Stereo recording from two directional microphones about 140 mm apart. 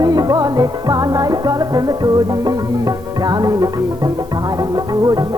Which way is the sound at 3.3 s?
30° right (ahead or behind).